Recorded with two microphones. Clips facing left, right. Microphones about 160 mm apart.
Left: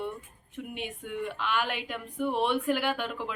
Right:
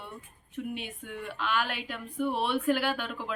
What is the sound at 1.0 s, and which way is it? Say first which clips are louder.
Speech: left 3 dB; 15° left (ahead or behind).